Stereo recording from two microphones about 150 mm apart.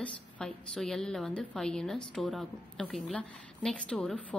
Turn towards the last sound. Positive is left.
turn(degrees=5)  # may be behind; listen again after turning